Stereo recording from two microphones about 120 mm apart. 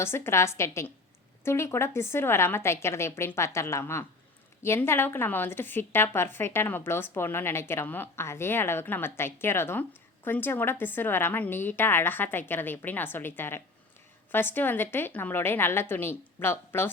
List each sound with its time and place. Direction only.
0.0 s a woman's voice: 20° left (ahead or behind)